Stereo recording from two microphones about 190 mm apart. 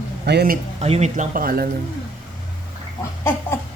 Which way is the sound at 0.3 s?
55° right (ahead or behind).